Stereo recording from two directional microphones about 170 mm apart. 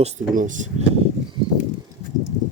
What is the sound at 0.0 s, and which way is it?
Speech, 45° right (ahead or behind).